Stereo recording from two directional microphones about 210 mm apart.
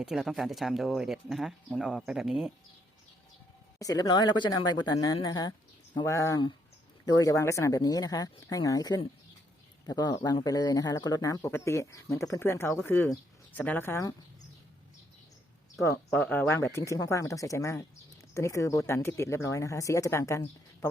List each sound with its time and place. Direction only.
0.0 s speech: centre (ahead or behind)
3.8 s speech: 15° left (ahead or behind)
15.8 s speech: 15° left (ahead or behind)